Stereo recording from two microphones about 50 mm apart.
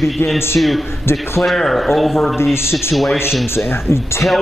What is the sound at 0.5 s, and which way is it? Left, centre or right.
Speech, centre.